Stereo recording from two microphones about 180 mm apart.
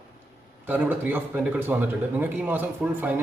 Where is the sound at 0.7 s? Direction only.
10° right (ahead or behind).